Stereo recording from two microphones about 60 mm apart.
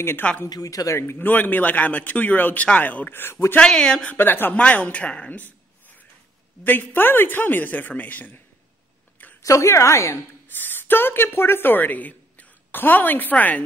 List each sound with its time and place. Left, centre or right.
0.5 s speech: left
1.1 s a man's voice: left
3.5 s speech: centre
4.2 s a man's voice: left
4.6 s a man's voice: left
6.6 s a man's voice: left
9.4 s a woman's voice: left
10.5 s a woman's voice: left